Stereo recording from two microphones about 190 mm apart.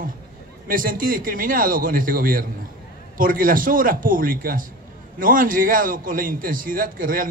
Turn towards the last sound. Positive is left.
turn(degrees=-45)  # may be behind; listen again after turning